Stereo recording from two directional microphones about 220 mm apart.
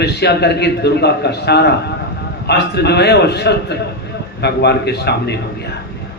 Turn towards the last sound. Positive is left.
turn(degrees=50)  # may be behind; listen again after turning